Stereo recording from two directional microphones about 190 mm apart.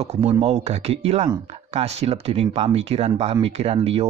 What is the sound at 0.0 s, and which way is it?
Speech, 35° right (ahead or behind).